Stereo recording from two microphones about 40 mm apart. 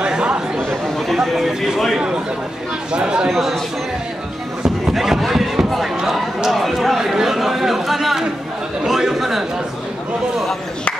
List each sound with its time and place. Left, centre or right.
0.0 s chatter: right
0.7 s chatter: centre
2.9 s speech: right
3.3 s speech: centre
4.6 s a sound: centre
6.5 s a sound: centre